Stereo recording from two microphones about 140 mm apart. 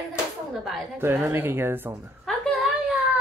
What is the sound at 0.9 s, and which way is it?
A woman's voice, 15° right (ahead or behind).